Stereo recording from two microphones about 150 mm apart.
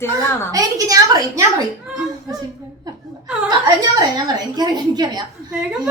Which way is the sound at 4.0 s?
30° right (ahead or behind).